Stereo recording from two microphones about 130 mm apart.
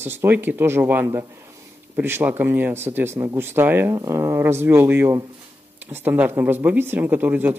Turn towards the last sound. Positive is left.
turn(degrees=-15)  # may be behind; listen again after turning